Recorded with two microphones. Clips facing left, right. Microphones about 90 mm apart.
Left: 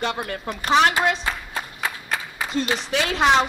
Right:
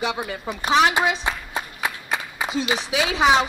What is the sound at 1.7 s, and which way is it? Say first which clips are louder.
Clapping: right 1 dB; 5° right (ahead or behind).